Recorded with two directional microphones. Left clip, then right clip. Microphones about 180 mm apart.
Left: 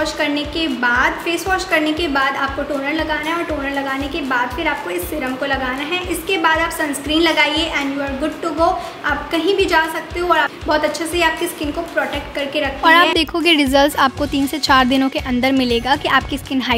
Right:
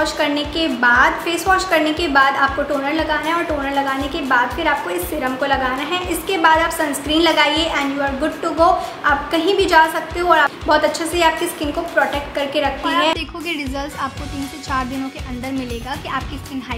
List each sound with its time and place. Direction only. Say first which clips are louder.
0.0 s a woman's voice: right 1 dB; centre (ahead or behind)
13.2 s speech: left 10 dB; 55° left (ahead or behind)